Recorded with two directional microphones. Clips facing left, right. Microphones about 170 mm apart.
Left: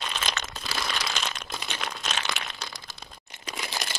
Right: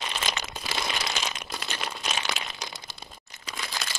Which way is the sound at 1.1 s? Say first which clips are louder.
Even; 10° right (ahead or behind).